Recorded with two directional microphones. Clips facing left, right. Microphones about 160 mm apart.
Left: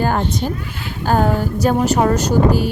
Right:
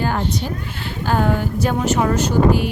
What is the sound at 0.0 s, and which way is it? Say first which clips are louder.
A woman's voice: left 3 dB; 45° left (ahead or behind).